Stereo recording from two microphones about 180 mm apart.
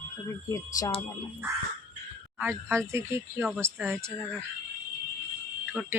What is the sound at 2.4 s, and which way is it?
Speech, 10° right (ahead or behind).